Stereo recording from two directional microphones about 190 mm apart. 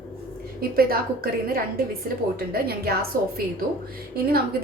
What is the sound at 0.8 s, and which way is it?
A woman's voice, 50° right (ahead or behind).